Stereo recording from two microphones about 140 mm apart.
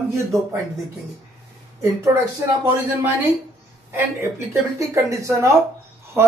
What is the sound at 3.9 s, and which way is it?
Speech, 15° right (ahead or behind).